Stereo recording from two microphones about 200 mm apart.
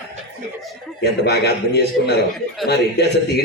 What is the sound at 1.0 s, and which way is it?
A man's voice, 55° left (ahead or behind).